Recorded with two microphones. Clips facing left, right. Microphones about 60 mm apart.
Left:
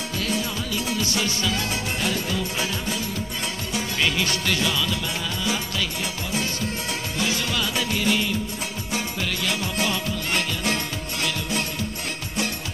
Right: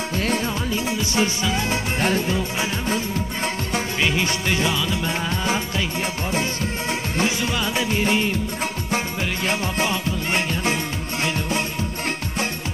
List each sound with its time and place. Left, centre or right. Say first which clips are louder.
0.1 s music: right 3 dB; right
2.0 s music: right 5 dB; right
4.0 s music: right 1 dB; right
6.9 s music: right 5 dB; right